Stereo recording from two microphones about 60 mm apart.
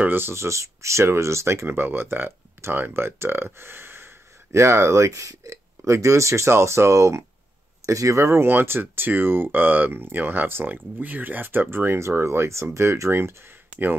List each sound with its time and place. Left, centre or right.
0.0 s speech: right